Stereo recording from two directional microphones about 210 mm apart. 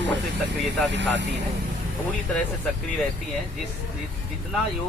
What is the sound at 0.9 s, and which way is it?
Speech, 55° right (ahead or behind).